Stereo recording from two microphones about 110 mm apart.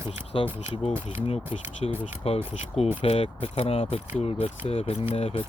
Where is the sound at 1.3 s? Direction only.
65° left (ahead or behind).